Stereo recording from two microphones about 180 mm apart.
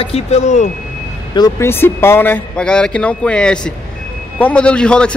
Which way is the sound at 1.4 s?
15° left (ahead or behind).